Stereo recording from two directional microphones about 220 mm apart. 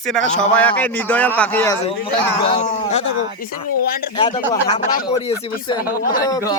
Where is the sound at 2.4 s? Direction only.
25° left (ahead or behind).